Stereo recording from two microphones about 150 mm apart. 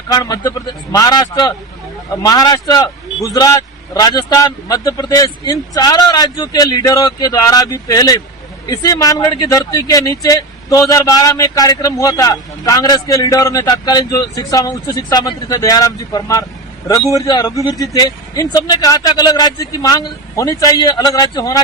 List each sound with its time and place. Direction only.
0.1 s speech: 25° left (ahead or behind)